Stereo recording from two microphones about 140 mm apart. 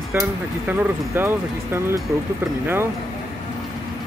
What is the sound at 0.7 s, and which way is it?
Speech, 15° right (ahead or behind).